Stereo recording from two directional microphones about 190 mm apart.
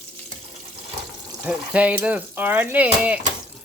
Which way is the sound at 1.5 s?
5° right (ahead or behind).